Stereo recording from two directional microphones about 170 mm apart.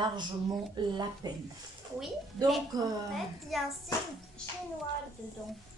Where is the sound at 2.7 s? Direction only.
25° right (ahead or behind).